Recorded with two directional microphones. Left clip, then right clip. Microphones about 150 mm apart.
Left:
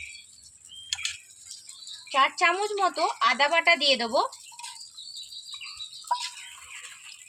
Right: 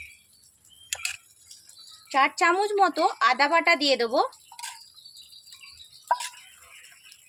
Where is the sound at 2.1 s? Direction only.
60° right (ahead or behind).